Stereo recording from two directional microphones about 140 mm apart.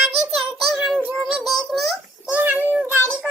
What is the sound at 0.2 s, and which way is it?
Child singing, centre (ahead or behind).